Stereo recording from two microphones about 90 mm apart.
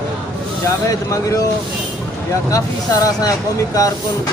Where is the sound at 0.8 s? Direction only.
40° left (ahead or behind).